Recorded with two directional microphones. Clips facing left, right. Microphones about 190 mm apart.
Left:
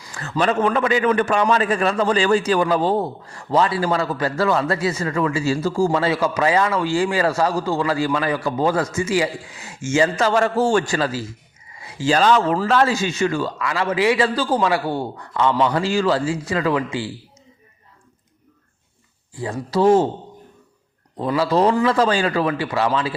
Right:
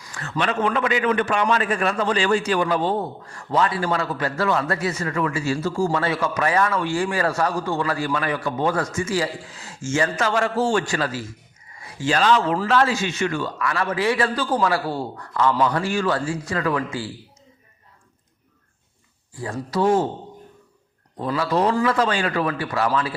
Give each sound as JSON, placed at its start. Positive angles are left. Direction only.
{"t": 0.0, "sound": "a man's voice", "side_deg": 30}
{"t": 9.9, "sound": "a man's voice", "side_deg": 25}
{"t": 10.2, "sound": "a man's voice", "side_deg": 40}
{"t": 12.0, "sound": "a man's voice", "side_deg": 40}
{"t": 13.6, "sound": "a man's voice", "side_deg": 20}
{"t": 19.3, "sound": "a man's voice", "side_deg": 25}
{"t": 21.2, "sound": "a man's voice", "side_deg": 30}